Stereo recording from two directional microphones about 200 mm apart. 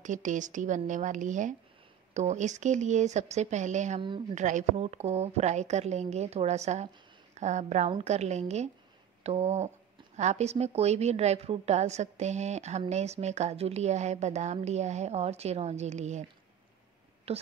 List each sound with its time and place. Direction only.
0.0 s a woman's voice: 40° right (ahead or behind)
17.3 s a woman's voice: 30° right (ahead or behind)